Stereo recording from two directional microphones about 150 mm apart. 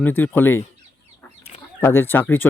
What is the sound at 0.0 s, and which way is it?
Speech, 10° left (ahead or behind).